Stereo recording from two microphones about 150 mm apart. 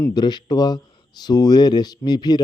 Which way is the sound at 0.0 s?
25° left (ahead or behind).